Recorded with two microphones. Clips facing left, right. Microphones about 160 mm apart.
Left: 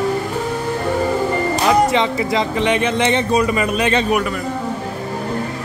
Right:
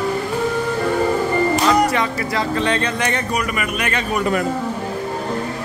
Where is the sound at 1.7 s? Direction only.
20° left (ahead or behind).